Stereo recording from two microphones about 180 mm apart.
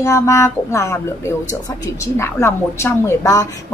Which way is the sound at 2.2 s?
15° left (ahead or behind).